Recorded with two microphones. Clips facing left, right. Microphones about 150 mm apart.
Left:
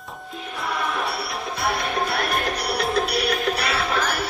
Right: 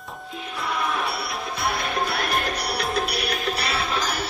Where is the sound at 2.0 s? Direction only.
40° left (ahead or behind).